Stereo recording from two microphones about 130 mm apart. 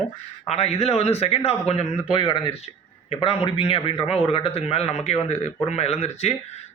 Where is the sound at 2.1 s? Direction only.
35° left (ahead or behind).